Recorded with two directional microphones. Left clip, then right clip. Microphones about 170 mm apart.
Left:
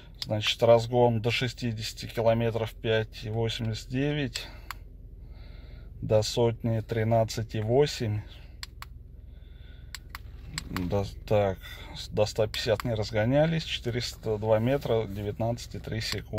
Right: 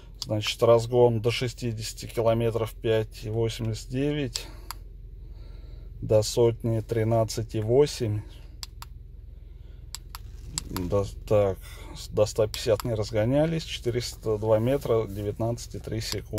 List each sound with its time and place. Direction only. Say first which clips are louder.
0.3 s speech: right 1 dB; 5° right (ahead or behind)
6.0 s speech: right 3 dB; 5° right (ahead or behind)
10.9 s speech: right 3 dB; 5° right (ahead or behind)